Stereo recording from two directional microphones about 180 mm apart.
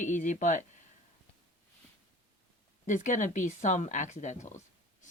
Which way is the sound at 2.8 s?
45° left (ahead or behind).